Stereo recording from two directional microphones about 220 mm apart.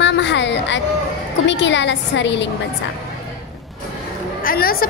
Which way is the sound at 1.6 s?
55° left (ahead or behind).